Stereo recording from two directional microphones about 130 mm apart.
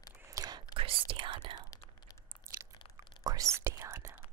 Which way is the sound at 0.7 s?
40° right (ahead or behind).